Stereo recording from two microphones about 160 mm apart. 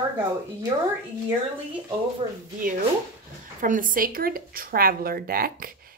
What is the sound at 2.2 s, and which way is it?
Speech, 35° right (ahead or behind).